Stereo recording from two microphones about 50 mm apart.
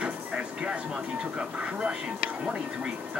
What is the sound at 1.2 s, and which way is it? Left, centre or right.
Speech, right.